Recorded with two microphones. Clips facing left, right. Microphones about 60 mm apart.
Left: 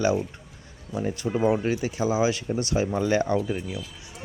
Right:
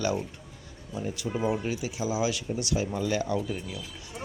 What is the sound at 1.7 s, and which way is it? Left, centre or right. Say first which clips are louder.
Speech: left 5 dB; left.